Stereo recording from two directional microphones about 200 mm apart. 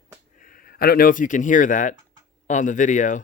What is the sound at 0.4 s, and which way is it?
Speech, 45° left (ahead or behind).